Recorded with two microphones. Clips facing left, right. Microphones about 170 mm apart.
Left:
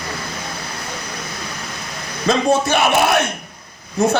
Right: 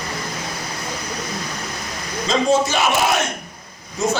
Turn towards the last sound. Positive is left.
turn(degrees=60)  # may be behind; listen again after turning